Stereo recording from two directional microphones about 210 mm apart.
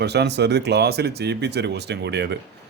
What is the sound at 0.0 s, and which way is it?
A man's voice, 50° right (ahead or behind).